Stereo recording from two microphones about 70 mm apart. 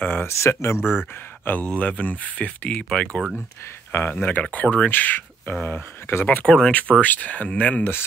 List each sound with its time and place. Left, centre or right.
0.0 s a sound: left
0.3 s speech: left
0.7 s speech: centre
1.4 s speech: left
3.9 s speech: left
6.2 s speech: left